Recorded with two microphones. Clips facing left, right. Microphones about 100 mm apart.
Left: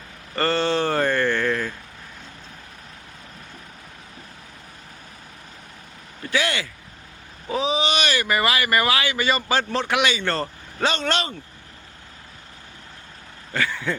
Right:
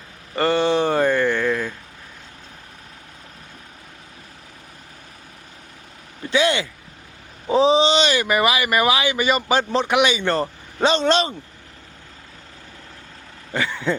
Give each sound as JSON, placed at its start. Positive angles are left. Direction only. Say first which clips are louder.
{"t": 0.3, "sound": "a sound", "louder": "right 3 dB", "side_deg": -15}
{"t": 6.3, "sound": "speech", "louder": "right 5 dB", "side_deg": -20}
{"t": 7.4, "sound": "speech", "louder": "right 7 dB", "side_deg": -30}
{"t": 13.5, "sound": "speech", "louder": "right 2 dB", "side_deg": -20}